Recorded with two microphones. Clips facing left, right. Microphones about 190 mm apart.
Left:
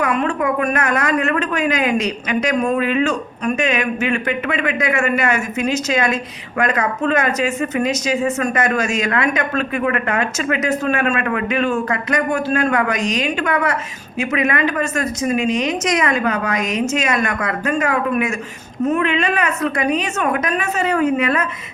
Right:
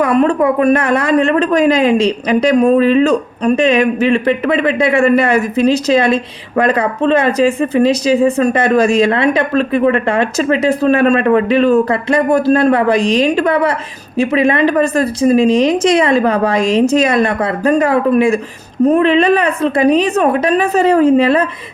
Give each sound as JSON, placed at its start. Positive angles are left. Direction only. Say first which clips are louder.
{"t": 0.0, "sound": "speech", "louder": "right 7 dB", "side_deg": -35}